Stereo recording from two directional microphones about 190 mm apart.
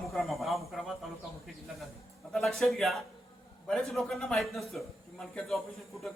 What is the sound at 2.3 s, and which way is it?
A man's voice, 5° left (ahead or behind).